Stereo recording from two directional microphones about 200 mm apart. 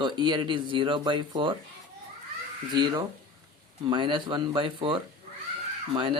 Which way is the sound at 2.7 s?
20° right (ahead or behind).